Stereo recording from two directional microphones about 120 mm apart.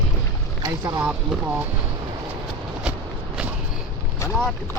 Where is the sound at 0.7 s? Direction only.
25° right (ahead or behind).